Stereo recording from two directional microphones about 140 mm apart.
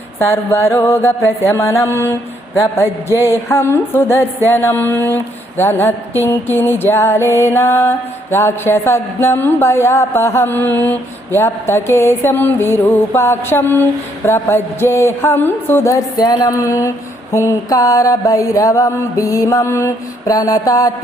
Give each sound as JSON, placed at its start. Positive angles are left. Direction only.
{"t": 0.2, "sound": "mantra", "side_deg": 20}